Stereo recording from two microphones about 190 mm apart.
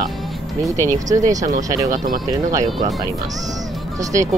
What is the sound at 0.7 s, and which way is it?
Speech, 10° left (ahead or behind).